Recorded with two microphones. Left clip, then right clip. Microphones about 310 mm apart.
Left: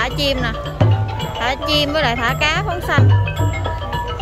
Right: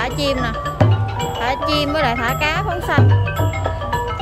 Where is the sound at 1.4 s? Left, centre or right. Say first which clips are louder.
Left 2 dB; centre.